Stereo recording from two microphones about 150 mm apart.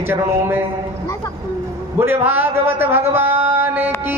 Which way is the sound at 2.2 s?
15° right (ahead or behind).